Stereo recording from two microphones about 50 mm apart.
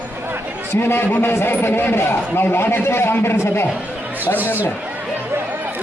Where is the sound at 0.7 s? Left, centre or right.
Left.